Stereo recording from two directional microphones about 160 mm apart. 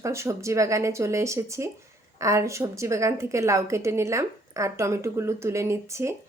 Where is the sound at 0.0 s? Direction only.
20° right (ahead or behind).